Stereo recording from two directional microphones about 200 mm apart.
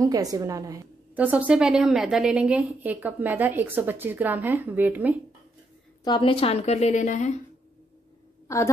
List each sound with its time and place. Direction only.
0.0 s a woman's voice: 20° right (ahead or behind)
6.0 s a woman's voice: 25° left (ahead or behind)
8.5 s a woman's voice: 15° left (ahead or behind)